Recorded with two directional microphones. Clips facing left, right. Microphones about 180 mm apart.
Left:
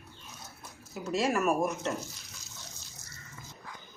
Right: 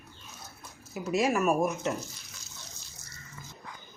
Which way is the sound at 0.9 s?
5° right (ahead or behind).